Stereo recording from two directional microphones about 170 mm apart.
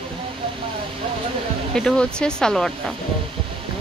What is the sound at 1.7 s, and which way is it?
A woman's voice, 5° left (ahead or behind).